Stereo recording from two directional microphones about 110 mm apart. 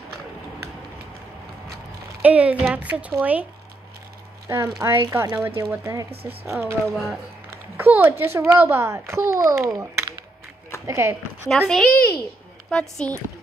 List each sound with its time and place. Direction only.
2.2 s a woman's voice: 10° right (ahead or behind)
4.5 s a child's voice: 30° right (ahead or behind)
5.3 s a child's voice: 20° right (ahead or behind)
6.9 s speech: 5° left (ahead or behind)
7.7 s a child's voice: 20° right (ahead or behind)
11.4 s speech: 5° left (ahead or behind)